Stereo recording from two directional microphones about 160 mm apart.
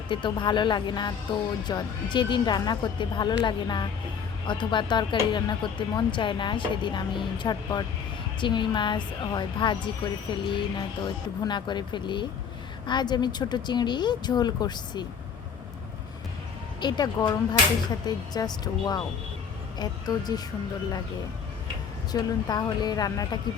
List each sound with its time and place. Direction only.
0.1 s a woman's voice: 30° left (ahead or behind)
16.8 s a woman's voice: 25° left (ahead or behind)
22.1 s a woman's voice: 25° left (ahead or behind)